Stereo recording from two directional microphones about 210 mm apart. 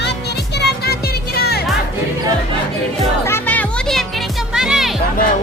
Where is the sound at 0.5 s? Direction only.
50° left (ahead or behind).